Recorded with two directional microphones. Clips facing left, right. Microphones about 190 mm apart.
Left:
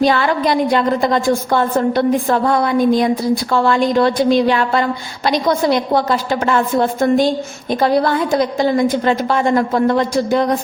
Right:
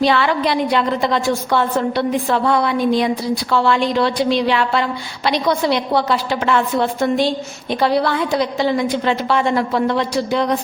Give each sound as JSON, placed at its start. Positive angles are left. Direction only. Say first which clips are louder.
{"t": 0.0, "sound": "a woman's voice", "louder": "left 2 dB", "side_deg": 45}